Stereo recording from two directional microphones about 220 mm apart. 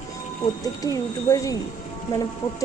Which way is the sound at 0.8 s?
15° left (ahead or behind).